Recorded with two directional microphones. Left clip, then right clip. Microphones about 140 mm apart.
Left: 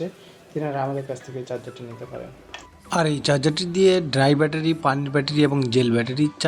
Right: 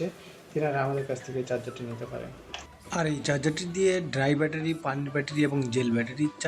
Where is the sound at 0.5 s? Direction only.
35° left (ahead or behind).